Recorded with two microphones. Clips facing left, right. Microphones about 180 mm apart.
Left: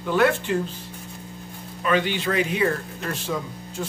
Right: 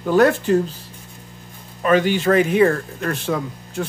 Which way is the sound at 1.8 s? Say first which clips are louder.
Right 6 dB; 45° right (ahead or behind).